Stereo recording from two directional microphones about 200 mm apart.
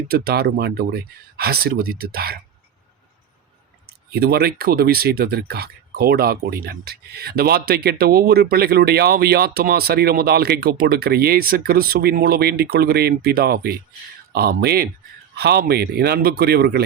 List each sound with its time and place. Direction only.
0.1 s speech: 50° right (ahead or behind)
4.1 s speech: 50° right (ahead or behind)